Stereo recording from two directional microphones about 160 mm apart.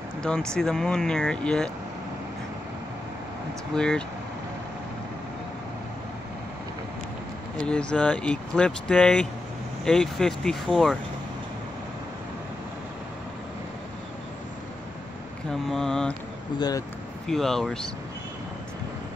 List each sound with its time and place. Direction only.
0.2 s speech: 5° left (ahead or behind)
3.7 s speech: 5° left (ahead or behind)
7.6 s speech: 5° left (ahead or behind)
15.7 s speech: 5° left (ahead or behind)
16.5 s speech: 25° left (ahead or behind)
17.3 s speech: centre (ahead or behind)